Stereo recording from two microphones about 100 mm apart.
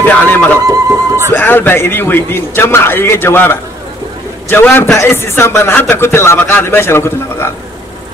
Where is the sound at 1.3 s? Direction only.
20° left (ahead or behind).